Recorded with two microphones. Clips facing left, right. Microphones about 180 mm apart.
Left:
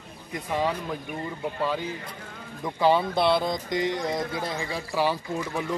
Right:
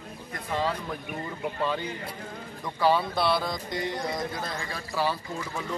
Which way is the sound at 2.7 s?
20° left (ahead or behind).